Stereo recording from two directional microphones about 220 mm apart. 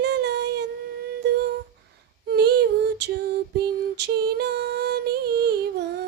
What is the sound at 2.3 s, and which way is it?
Female singing, 50° right (ahead or behind).